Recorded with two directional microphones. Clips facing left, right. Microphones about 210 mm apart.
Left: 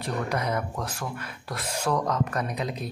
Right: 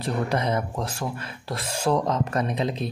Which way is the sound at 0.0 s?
30° right (ahead or behind).